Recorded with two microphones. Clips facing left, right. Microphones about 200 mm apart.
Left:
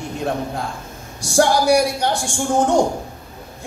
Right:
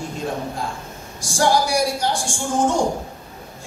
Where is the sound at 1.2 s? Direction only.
65° left (ahead or behind).